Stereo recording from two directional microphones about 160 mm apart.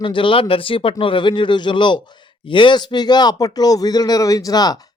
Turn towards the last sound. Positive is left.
turn(degrees=25)  # may be behind; listen again after turning